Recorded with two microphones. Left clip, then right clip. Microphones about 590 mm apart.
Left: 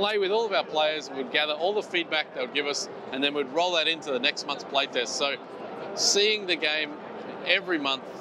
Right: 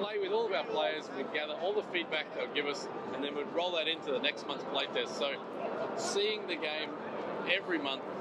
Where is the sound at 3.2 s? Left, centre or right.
Left.